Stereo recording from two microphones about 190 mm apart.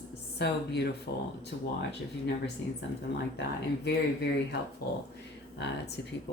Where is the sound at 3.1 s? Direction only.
65° left (ahead or behind).